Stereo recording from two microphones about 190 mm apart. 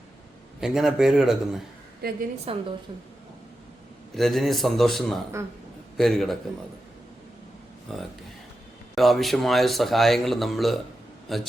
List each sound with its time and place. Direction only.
0.6 s speech: centre (ahead or behind)
2.0 s a woman's voice: 55° right (ahead or behind)
2.5 s a woman's voice: 30° right (ahead or behind)
4.1 s speech: centre (ahead or behind)
7.9 s speech: centre (ahead or behind)